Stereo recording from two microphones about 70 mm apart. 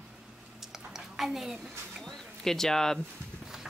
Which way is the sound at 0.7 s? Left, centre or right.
Centre.